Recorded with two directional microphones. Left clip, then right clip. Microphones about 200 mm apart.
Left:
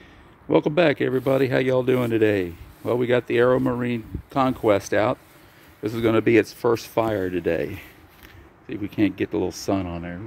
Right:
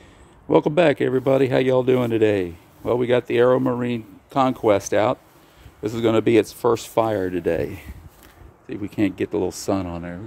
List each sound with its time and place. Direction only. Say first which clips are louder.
0.5 s speech: right 2 dB; 5° right (ahead or behind)